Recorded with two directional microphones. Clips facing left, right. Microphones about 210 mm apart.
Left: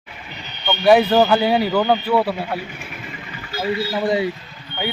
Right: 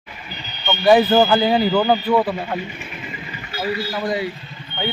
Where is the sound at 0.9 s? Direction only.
5° right (ahead or behind).